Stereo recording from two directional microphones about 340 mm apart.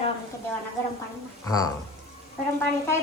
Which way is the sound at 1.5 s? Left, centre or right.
Centre.